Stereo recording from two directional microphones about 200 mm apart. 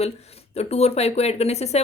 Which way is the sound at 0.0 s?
30° left (ahead or behind).